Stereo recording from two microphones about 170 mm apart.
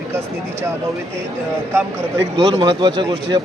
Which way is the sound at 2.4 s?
25° right (ahead or behind).